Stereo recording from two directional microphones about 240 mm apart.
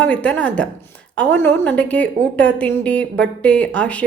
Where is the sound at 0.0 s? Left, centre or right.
Centre.